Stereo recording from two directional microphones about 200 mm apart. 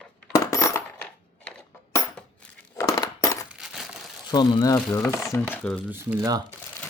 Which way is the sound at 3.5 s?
5° right (ahead or behind).